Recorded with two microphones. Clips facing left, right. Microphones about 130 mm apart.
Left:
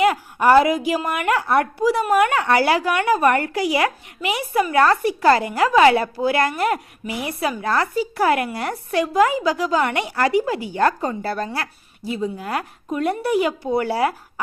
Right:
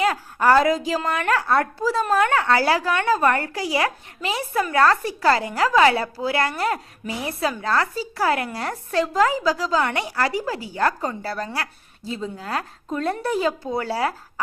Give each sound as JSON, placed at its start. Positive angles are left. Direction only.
{"t": 0.0, "sound": "a woman's voice", "side_deg": 15}